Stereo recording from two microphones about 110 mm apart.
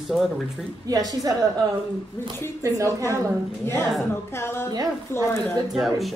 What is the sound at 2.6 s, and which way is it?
Speech, 30° right (ahead or behind).